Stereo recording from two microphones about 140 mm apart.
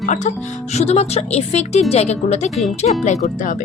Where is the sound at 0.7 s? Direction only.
50° left (ahead or behind).